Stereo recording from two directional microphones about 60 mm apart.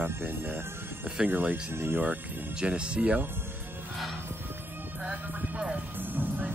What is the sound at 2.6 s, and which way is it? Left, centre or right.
Speech, centre.